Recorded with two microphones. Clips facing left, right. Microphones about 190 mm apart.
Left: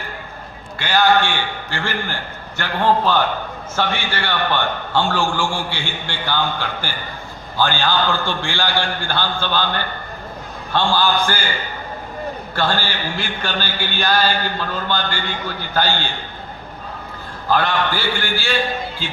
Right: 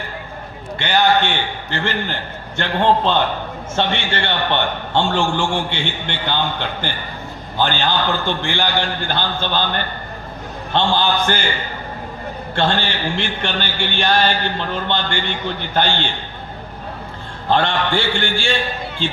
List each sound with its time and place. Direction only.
0.8 s a man's voice: 25° right (ahead or behind)
12.5 s a man's voice: 25° right (ahead or behind)
17.5 s a man's voice: 25° right (ahead or behind)